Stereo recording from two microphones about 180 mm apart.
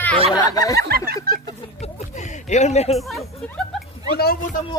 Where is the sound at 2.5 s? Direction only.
40° left (ahead or behind).